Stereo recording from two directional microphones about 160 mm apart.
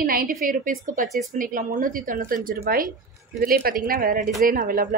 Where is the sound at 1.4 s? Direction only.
60° right (ahead or behind).